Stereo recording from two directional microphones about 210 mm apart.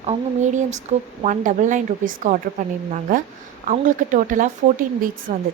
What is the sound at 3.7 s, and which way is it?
A woman's voice, 40° right (ahead or behind).